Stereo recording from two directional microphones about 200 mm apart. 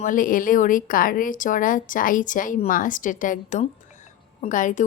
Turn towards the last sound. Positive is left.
turn(degrees=40)  # may be behind; listen again after turning